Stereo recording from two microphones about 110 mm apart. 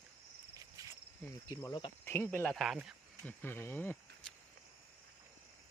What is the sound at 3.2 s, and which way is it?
Speech, 20° left (ahead or behind).